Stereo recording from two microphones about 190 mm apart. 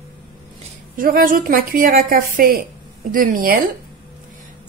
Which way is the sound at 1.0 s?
45° right (ahead or behind).